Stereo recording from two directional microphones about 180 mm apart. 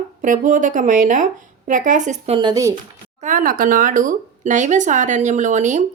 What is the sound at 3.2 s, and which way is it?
A woman's voice, 45° right (ahead or behind).